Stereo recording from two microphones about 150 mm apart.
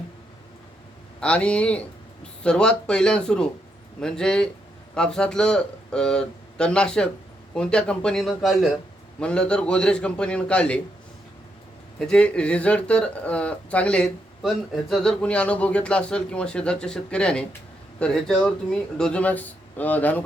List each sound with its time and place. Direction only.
1.2 s speech: 10° left (ahead or behind)
11.9 s speech: 5° left (ahead or behind)